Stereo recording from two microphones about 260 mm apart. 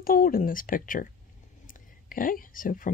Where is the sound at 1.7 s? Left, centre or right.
Left.